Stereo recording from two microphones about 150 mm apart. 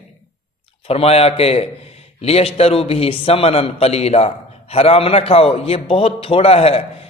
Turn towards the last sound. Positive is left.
turn(degrees=40)  # may be behind; listen again after turning